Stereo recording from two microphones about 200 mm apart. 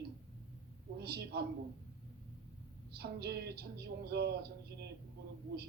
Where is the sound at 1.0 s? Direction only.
50° right (ahead or behind).